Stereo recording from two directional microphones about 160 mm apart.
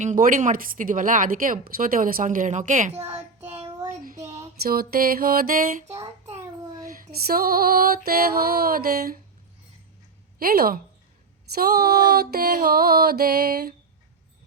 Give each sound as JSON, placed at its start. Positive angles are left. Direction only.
{"t": 0.0, "sound": "speech", "side_deg": -55}
{"t": 4.0, "sound": "a sound", "side_deg": -55}
{"t": 4.6, "sound": "female singing", "side_deg": -70}
{"t": 5.9, "sound": "a child's voice", "side_deg": -40}
{"t": 6.7, "sound": "female singing", "side_deg": -65}
{"t": 10.3, "sound": "a woman's voice", "side_deg": -65}
{"t": 11.5, "sound": "female singing", "side_deg": -75}